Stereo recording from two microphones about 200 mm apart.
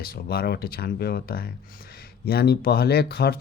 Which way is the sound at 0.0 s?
50° left (ahead or behind).